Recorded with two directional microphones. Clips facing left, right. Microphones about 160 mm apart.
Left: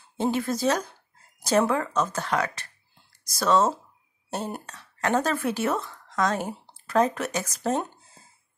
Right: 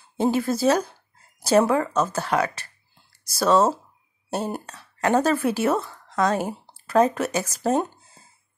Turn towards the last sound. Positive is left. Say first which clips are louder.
# right 4 dB
turn(degrees=-10)  # may be behind; listen again after turning